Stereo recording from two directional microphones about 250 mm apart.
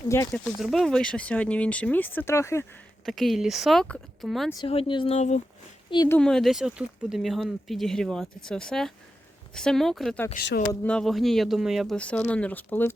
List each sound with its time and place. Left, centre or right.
0.6 s speech: centre
3.1 s speech: centre
4.5 s speech: left
5.9 s speech: centre
6.1 s speech: centre
10.3 s speech: left
10.7 s speech: centre